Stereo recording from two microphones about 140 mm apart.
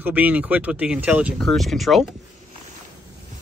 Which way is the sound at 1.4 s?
Centre (ahead or behind).